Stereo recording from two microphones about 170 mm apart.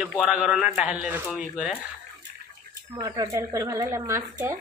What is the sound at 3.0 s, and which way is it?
Speech, 25° right (ahead or behind).